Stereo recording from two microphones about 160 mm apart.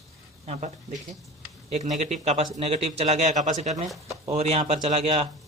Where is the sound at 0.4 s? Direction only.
45° right (ahead or behind).